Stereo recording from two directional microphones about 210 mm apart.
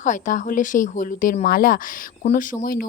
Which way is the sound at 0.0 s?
35° left (ahead or behind).